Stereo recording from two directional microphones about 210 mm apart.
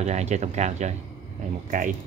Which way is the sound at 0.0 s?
30° right (ahead or behind).